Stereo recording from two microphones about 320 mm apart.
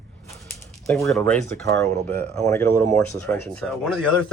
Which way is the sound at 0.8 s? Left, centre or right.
Centre.